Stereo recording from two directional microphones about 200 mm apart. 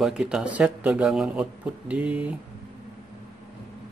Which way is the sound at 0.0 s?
5° right (ahead or behind).